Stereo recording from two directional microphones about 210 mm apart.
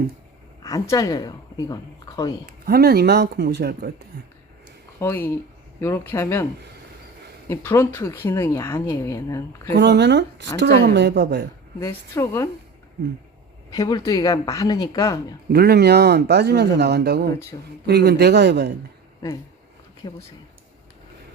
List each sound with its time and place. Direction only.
0.6 s a woman's voice: 15° left (ahead or behind)
2.5 s speech: 45° right (ahead or behind)
4.9 s speech: 10° left (ahead or behind)
9.7 s speech: 55° right (ahead or behind)
11.8 s speech: 15° left (ahead or behind)
13.7 s speech: 15° left (ahead or behind)
15.5 s speech: 50° right (ahead or behind)
20.0 s speech: 25° left (ahead or behind)